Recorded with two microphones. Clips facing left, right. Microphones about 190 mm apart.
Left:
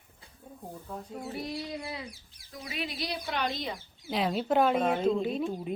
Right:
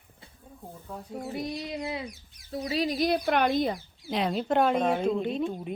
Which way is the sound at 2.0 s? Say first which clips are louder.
Right 4 dB; 30° left (ahead or behind).